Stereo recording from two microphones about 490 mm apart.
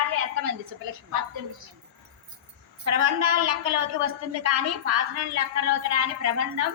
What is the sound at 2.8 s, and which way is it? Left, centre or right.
A woman's voice, right.